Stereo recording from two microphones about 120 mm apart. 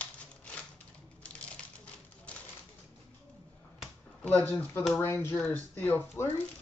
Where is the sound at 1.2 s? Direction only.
10° left (ahead or behind).